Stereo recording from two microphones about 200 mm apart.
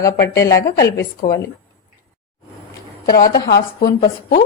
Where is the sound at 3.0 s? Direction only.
50° left (ahead or behind).